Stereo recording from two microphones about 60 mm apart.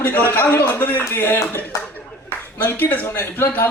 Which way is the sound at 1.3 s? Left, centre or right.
Left.